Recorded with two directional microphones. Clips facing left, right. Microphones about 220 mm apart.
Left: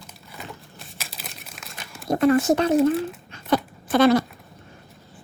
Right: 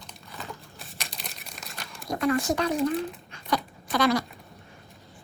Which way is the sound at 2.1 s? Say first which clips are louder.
Left 7 dB; 25° left (ahead or behind).